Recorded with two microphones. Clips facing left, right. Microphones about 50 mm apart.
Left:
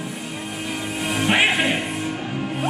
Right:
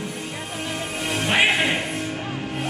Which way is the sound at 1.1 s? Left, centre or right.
Centre.